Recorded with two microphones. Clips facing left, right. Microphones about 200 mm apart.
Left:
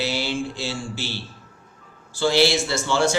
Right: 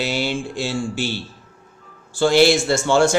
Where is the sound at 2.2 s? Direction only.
50° right (ahead or behind).